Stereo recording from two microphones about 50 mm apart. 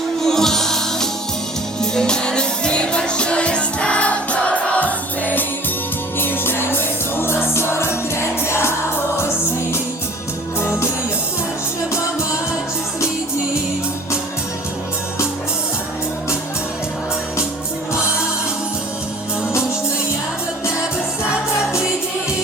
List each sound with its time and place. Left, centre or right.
0.2 s music: centre; by 5.5 s left
6.1 s music: left
10.6 s music: left